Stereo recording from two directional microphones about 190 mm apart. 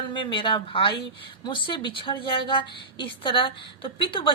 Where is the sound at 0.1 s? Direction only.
25° left (ahead or behind).